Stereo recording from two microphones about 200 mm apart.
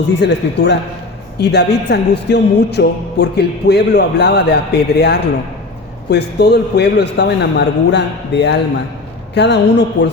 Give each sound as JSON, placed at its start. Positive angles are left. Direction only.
{"t": 0.2, "sound": "speech", "side_deg": 60}